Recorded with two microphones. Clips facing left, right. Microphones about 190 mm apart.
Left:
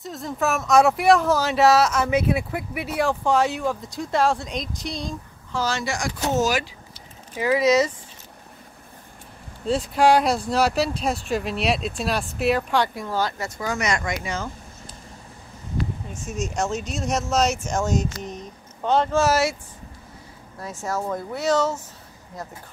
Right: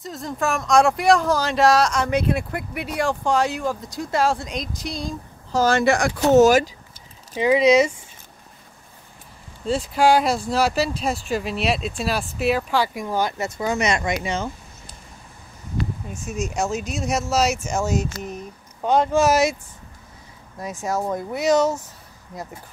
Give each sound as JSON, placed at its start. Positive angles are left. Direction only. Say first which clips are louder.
{"t": 0.0, "sound": "speech", "louder": "even", "side_deg": 0}
{"t": 5.5, "sound": "speech", "louder": "right 8 dB", "side_deg": -50}
{"t": 7.3, "sound": "speech", "louder": "right 3 dB", "side_deg": -20}
{"t": 9.7, "sound": "speech", "louder": "even", "side_deg": 0}
{"t": 12.9, "sound": "speech", "louder": "right 2 dB", "side_deg": -15}
{"t": 16.3, "sound": "speech", "louder": "right 1 dB", "side_deg": -10}
{"t": 20.6, "sound": "speech", "louder": "right 3 dB", "side_deg": -15}